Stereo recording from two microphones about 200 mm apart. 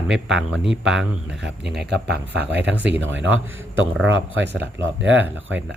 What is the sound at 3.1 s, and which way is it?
A man's voice, 75° right (ahead or behind).